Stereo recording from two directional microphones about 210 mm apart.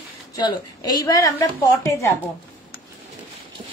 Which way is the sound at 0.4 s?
20° left (ahead or behind).